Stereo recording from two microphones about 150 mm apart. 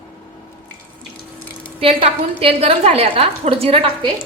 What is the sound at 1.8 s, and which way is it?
A woman's voice, 40° right (ahead or behind).